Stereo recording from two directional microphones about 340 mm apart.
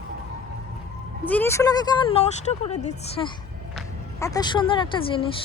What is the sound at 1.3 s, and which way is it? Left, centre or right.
A woman's voice, centre.